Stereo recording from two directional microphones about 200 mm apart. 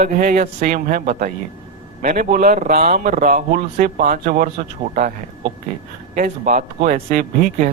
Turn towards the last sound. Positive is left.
turn(degrees=-40)  # may be behind; listen again after turning